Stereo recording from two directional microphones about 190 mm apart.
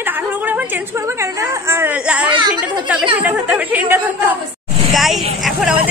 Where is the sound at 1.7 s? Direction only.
10° right (ahead or behind).